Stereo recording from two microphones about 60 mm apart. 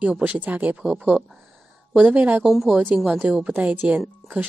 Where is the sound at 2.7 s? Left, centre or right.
Right.